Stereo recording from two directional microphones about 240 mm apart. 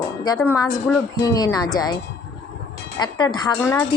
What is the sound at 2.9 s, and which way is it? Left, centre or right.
Speech, centre.